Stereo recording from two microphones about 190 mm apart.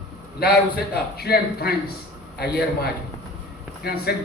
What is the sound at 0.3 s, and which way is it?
A man's voice, 55° left (ahead or behind).